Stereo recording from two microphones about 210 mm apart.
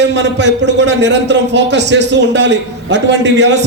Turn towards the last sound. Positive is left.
turn(degrees=-55)  # may be behind; listen again after turning